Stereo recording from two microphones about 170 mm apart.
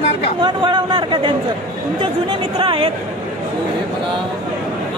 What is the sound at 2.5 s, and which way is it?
Speech, 30° right (ahead or behind).